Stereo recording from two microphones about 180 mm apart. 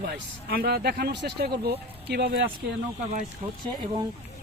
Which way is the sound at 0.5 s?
60° right (ahead or behind).